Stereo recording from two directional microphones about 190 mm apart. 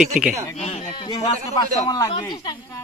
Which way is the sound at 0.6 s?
35° left (ahead or behind).